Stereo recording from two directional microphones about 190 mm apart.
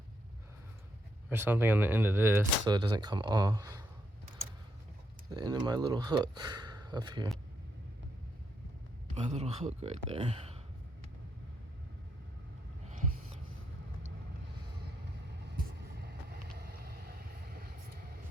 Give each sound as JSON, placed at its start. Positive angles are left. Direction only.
{"t": 1.3, "sound": "speech", "side_deg": -10}
{"t": 2.6, "sound": "speech", "side_deg": -20}
{"t": 5.3, "sound": "speech", "side_deg": -20}
{"t": 9.1, "sound": "speech", "side_deg": -35}
{"t": 12.9, "sound": "a sound", "side_deg": -40}
{"t": 15.5, "sound": "vehicle", "side_deg": -55}